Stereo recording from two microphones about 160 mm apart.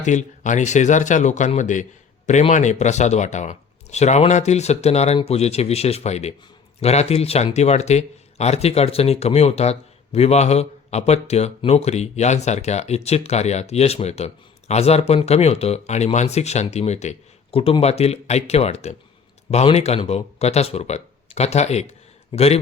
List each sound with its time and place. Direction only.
0.0 s speech: 50° left (ahead or behind)